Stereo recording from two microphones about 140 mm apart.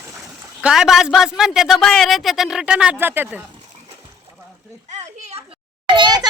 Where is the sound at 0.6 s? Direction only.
5° right (ahead or behind).